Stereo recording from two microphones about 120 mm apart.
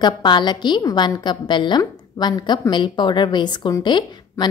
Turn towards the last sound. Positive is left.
turn(degrees=40)  # may be behind; listen again after turning